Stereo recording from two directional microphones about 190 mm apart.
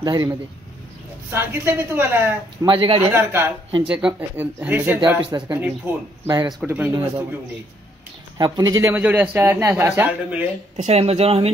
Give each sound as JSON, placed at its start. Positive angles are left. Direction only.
{"t": 0.0, "sound": "a man's voice", "side_deg": -20}
{"t": 2.6, "sound": "speech", "side_deg": -25}
{"t": 3.1, "sound": "a man's voice", "side_deg": -10}
{"t": 5.2, "sound": "speech", "side_deg": -20}
{"t": 6.6, "sound": "a man's voice", "side_deg": -10}
{"t": 8.4, "sound": "a man's voice", "side_deg": -20}
{"t": 10.8, "sound": "speech", "side_deg": -35}